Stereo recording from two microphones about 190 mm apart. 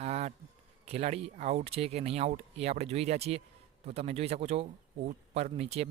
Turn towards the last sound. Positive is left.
turn(degrees=-35)  # may be behind; listen again after turning